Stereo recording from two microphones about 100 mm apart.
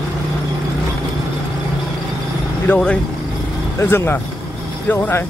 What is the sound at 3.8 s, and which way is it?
Speech, 25° left (ahead or behind).